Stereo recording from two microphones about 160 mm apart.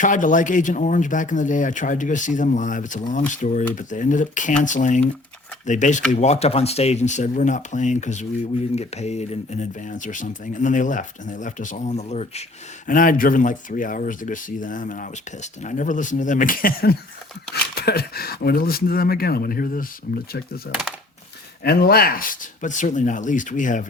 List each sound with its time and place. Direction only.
0.0 s speech: 55° left (ahead or behind)
12.9 s speech: 60° left (ahead or behind)
17.5 s speech: 80° left
21.6 s speech: 75° left (ahead or behind); by 23.8 s 55° left (ahead or behind)